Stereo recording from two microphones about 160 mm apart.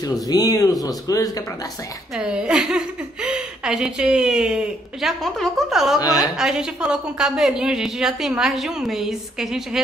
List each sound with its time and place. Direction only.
0.0 s speech: 25° left (ahead or behind)
2.1 s a woman's voice: 5° right (ahead or behind)